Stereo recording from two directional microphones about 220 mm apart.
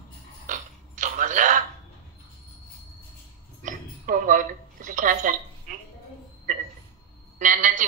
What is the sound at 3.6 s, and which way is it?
Dishes, 35° right (ahead or behind).